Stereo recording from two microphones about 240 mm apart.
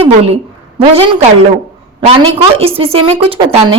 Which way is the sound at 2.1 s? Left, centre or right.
Right.